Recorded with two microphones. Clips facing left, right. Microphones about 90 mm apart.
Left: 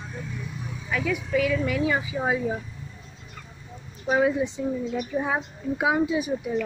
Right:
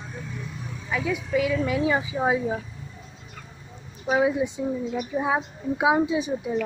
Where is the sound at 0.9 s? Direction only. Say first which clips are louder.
Even; 20° right (ahead or behind).